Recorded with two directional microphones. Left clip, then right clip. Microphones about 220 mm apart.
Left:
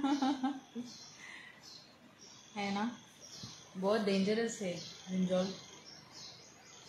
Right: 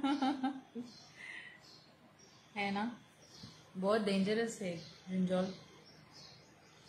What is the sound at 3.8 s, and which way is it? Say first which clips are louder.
Speech: left 1 dB; 25° right (ahead or behind).